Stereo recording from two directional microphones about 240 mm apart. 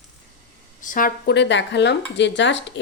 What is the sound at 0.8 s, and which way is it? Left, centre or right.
Speech, left.